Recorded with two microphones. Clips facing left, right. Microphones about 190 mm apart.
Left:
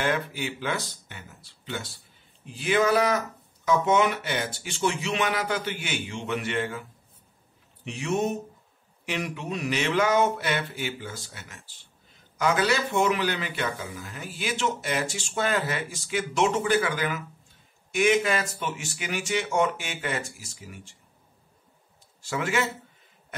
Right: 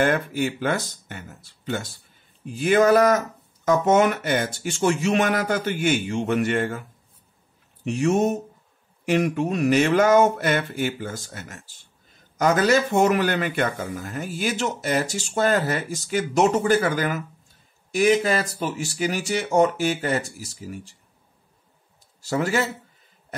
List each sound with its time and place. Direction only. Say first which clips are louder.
0.0 s a man's voice: right 6 dB; 50° right (ahead or behind)
7.8 s a man's voice: right 7 dB; 45° right (ahead or behind)
22.2 s speech: right 4 dB; 40° right (ahead or behind)